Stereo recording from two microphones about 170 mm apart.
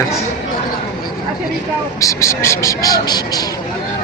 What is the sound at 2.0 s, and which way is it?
Speech, 20° left (ahead or behind).